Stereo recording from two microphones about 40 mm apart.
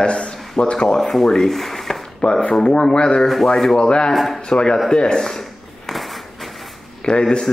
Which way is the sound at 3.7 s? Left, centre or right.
Left.